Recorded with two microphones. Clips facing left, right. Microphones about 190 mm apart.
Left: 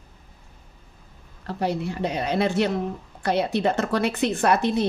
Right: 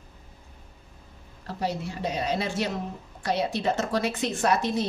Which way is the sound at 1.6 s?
60° left (ahead or behind).